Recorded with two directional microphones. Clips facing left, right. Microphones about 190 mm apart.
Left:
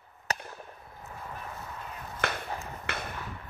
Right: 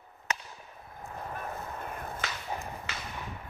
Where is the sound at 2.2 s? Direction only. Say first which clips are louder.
Left 7 dB; 60° left (ahead or behind).